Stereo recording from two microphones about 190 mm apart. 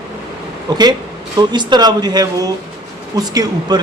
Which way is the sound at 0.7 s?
20° right (ahead or behind).